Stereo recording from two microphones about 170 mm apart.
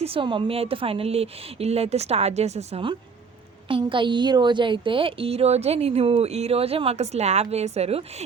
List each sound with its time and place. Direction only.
0.0 s a woman's voice: 30° right (ahead or behind)